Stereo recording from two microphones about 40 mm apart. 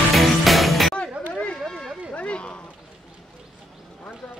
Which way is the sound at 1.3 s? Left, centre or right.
Left.